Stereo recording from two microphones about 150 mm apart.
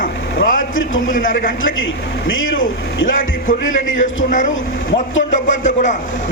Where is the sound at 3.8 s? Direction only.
60° left (ahead or behind).